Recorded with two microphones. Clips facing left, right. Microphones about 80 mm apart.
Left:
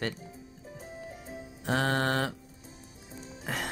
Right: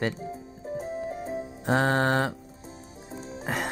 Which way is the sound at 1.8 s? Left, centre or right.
Centre.